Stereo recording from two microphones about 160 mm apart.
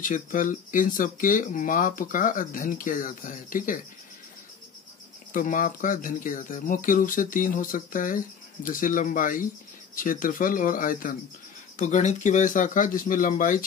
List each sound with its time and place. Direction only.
0.0 s speech: 55° left (ahead or behind)
5.3 s speech: 55° left (ahead or behind)